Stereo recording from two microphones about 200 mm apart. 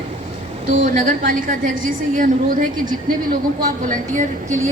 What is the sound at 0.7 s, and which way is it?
A woman's voice, 40° right (ahead or behind).